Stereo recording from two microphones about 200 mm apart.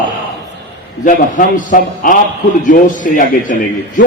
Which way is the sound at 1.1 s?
40° left (ahead or behind).